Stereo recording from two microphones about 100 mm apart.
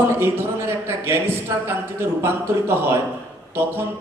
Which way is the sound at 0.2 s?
25° right (ahead or behind).